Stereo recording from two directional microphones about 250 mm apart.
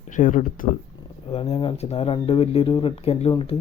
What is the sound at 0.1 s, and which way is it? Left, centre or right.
Speech, left.